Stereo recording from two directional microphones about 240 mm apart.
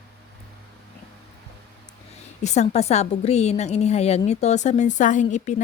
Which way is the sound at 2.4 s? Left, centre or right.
Left.